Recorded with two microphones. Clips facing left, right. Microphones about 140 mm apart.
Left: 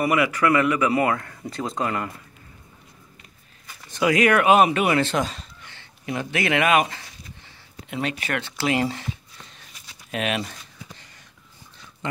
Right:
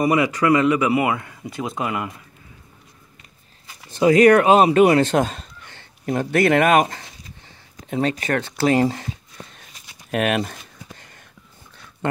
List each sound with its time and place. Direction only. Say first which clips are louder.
0.0 s speech: right 2 dB; 20° right (ahead or behind)
3.9 s speech: right 6 dB; 35° right (ahead or behind)
7.4 s a sound: right 3 dB; 40° right (ahead or behind)
12.0 s speech: right 6 dB; 55° right (ahead or behind)